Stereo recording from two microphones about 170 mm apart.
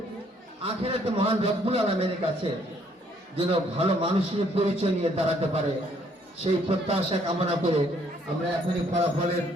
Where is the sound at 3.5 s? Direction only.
35° right (ahead or behind).